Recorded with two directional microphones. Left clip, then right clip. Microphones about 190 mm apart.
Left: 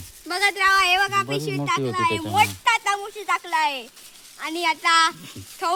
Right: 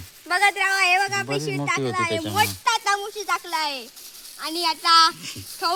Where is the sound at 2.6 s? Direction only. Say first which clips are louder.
Left 1 dB; 25° left (ahead or behind).